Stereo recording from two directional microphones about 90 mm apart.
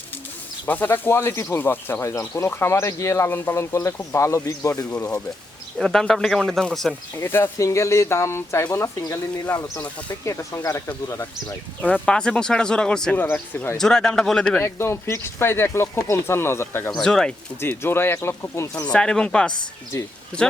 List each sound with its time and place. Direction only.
0.6 s speech: 20° left (ahead or behind); by 4.9 s 35° left (ahead or behind)
5.7 s speech: 5° left (ahead or behind)
7.2 s speech: 25° left (ahead or behind)
9.0 s speech: 40° left (ahead or behind)
12.0 s speech: 10° left (ahead or behind)
14.6 s speech: 30° left (ahead or behind)
16.9 s speech: 5° left (ahead or behind)
17.6 s speech: 25° left (ahead or behind)
18.9 s speech: 10° left (ahead or behind)